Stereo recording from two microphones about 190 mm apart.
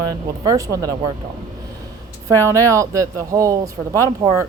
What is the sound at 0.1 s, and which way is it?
Speech, 20° right (ahead or behind).